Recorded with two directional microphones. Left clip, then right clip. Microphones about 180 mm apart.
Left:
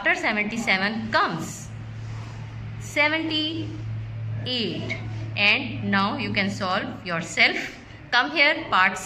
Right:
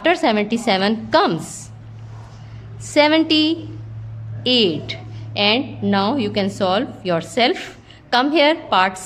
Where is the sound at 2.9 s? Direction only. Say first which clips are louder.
Right 8 dB; 60° right (ahead or behind).